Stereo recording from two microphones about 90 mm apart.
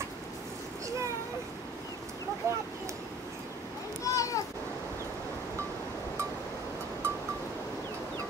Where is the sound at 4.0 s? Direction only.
35° left (ahead or behind).